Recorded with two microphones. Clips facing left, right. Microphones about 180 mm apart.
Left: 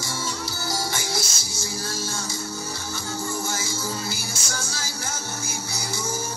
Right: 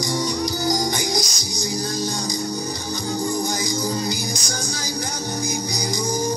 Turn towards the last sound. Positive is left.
turn(degrees=-15)  # may be behind; listen again after turning